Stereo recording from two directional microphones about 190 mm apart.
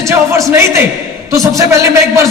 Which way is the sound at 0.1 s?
15° right (ahead or behind).